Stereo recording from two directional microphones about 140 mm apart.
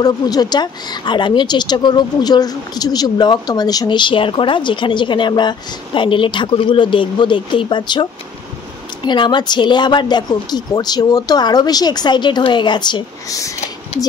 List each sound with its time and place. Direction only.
0.0 s a woman's voice: 30° left (ahead or behind)